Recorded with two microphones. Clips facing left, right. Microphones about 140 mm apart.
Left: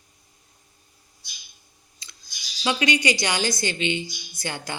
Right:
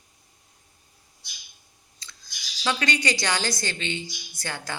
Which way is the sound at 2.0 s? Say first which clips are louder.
Right 2 dB; 15° left (ahead or behind).